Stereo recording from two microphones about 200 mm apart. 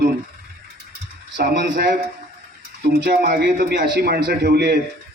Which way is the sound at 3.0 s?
50° right (ahead or behind).